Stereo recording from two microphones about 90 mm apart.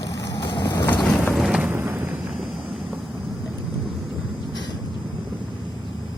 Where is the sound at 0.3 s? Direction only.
55° left (ahead or behind).